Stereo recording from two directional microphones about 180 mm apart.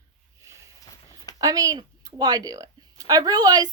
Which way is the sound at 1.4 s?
20° right (ahead or behind).